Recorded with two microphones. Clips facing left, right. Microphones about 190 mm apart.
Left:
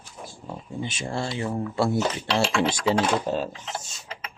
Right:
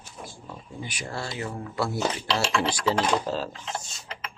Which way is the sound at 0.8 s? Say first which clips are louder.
Left 5 dB; 25° left (ahead or behind).